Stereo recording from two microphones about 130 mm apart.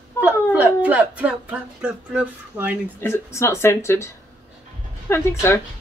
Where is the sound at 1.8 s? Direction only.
10° right (ahead or behind).